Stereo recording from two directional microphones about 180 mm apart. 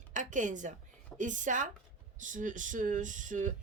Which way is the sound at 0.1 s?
45° right (ahead or behind).